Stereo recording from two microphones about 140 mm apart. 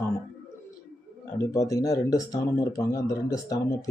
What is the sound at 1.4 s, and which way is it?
Speech, 25° left (ahead or behind).